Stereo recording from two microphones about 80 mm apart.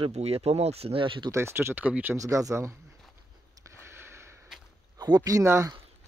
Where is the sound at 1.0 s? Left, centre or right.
Right.